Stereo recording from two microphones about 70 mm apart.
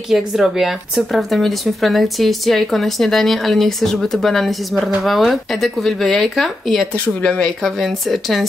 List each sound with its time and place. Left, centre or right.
0.1 s speech: centre
7.2 s speech: centre
7.4 s speech: centre